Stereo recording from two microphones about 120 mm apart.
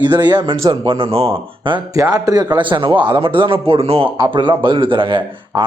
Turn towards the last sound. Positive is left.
turn(degrees=-45)  # may be behind; listen again after turning